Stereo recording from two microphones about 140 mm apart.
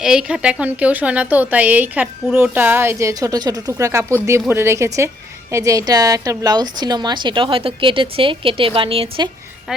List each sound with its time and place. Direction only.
0.0 s a woman's voice: 5° right (ahead or behind); by 9.3 s 40° right (ahead or behind)